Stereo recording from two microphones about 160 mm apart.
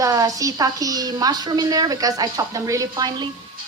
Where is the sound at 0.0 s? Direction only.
20° right (ahead or behind).